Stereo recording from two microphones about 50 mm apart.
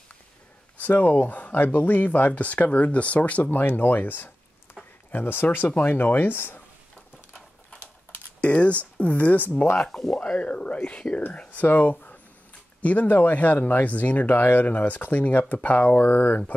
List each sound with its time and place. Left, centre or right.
0.7 s speech: left
8.4 s speech: left
9.8 s speech: centre
10.2 s speech: left